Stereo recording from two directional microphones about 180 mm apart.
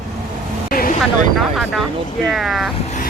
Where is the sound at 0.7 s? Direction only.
55° left (ahead or behind).